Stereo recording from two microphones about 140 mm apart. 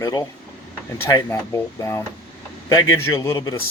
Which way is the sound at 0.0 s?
30° left (ahead or behind).